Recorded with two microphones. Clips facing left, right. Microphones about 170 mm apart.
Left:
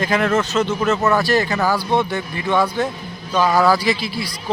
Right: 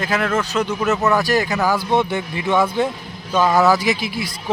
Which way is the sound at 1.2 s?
15° right (ahead or behind).